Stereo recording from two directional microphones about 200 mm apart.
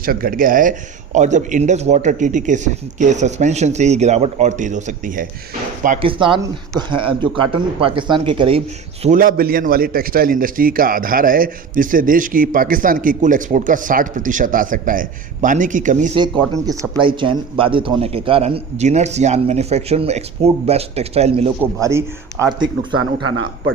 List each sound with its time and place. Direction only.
0.0 s speech: 45° right (ahead or behind)
6.0 s a man's voice: 25° right (ahead or behind)
9.0 s a man's voice: 45° right (ahead or behind)
16.1 s a man's voice: 20° right (ahead or behind)
21.6 s a man's voice: 15° right (ahead or behind)
22.9 s a man's voice: 85° right